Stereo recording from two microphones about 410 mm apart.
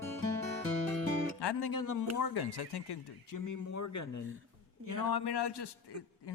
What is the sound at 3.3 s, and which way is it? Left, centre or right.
Speech, left.